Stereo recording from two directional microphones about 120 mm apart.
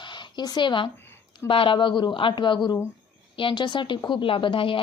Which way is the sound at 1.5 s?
45° left (ahead or behind).